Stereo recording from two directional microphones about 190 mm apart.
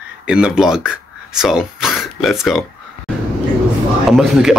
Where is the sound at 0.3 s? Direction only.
5° right (ahead or behind).